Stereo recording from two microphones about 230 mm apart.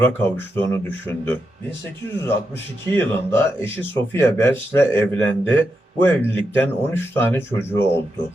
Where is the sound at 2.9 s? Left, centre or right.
Centre.